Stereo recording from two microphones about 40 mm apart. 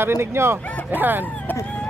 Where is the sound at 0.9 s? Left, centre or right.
Right.